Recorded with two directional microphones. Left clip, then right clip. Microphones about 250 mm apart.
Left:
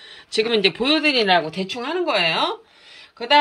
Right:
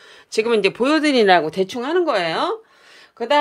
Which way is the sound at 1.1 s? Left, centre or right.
Right.